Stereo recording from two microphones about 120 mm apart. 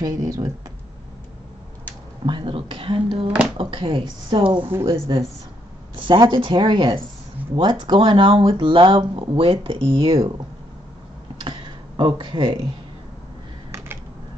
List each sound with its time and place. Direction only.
0.0 s speech: 25° right (ahead or behind)
2.2 s speech: 45° right (ahead or behind)
4.6 s speech: 20° right (ahead or behind)
6.0 s speech: 40° right (ahead or behind)
11.3 s a sound: 40° right (ahead or behind)